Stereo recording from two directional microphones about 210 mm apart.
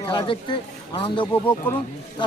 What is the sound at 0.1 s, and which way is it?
Speech, 25° left (ahead or behind).